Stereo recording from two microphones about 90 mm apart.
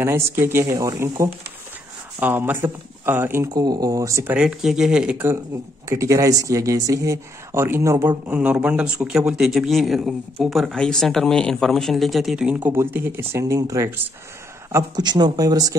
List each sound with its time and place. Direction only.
0.0 s speech: 30° right (ahead or behind)
2.1 s speech: 20° right (ahead or behind)
3.5 s speech: 45° right (ahead or behind)
4.3 s speech: 10° right (ahead or behind)
5.1 s speech: 25° right (ahead or behind)
5.9 s speech: 35° right (ahead or behind)
8.3 s speech: 15° right (ahead or behind)
12.5 s speech: 25° right (ahead or behind)
15.0 s speech: 50° right (ahead or behind)